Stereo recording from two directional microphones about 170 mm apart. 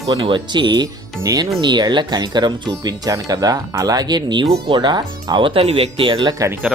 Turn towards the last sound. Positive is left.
turn(degrees=-25)  # may be behind; listen again after turning